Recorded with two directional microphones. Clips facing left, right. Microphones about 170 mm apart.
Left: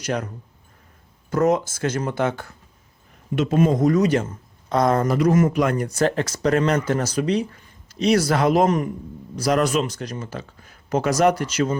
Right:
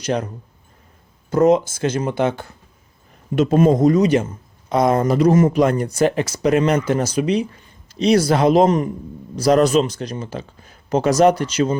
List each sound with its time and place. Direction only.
0.0 s speech: 25° right (ahead or behind)
1.3 s speech: 20° right (ahead or behind)
3.3 s speech: 40° right (ahead or behind); by 5.1 s 15° right (ahead or behind)
5.1 s speech: 30° right (ahead or behind)
6.0 s speech: 15° right (ahead or behind)